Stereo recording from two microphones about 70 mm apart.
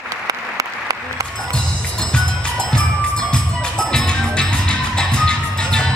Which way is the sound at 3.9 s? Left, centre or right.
Centre.